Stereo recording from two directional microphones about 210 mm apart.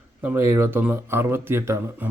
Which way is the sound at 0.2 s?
10° right (ahead or behind).